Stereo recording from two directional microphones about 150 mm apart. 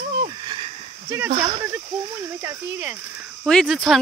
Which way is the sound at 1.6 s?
20° right (ahead or behind).